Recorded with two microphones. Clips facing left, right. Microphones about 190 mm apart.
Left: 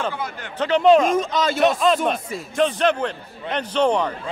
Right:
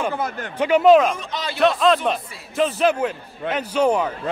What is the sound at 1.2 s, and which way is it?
Speech, 45° left (ahead or behind).